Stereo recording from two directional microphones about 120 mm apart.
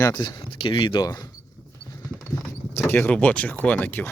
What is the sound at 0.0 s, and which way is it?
Speech, 35° left (ahead or behind).